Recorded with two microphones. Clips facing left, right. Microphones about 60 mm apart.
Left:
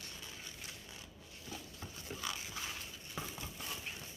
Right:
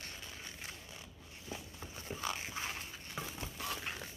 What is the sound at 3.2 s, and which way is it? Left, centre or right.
Stir, centre.